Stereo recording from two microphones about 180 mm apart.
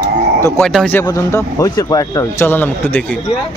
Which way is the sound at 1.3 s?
20° left (ahead or behind).